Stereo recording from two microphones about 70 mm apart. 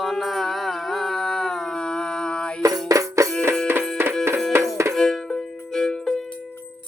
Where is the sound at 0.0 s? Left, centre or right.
Centre.